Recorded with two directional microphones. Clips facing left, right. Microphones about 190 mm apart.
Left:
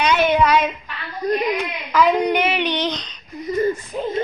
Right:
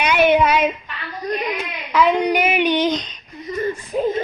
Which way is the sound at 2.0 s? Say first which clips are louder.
Even; centre (ahead or behind).